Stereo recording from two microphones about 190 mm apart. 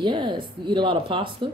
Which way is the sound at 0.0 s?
25° right (ahead or behind).